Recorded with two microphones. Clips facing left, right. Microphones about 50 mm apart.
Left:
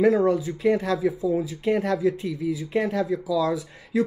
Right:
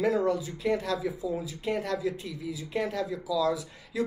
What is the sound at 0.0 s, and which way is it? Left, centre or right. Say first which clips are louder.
Speech: left 7 dB; left.